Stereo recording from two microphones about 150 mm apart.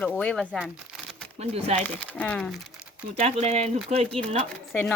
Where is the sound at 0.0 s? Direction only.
10° left (ahead or behind).